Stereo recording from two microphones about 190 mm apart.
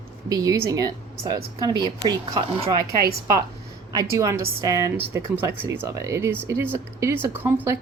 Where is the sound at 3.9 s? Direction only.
20° right (ahead or behind).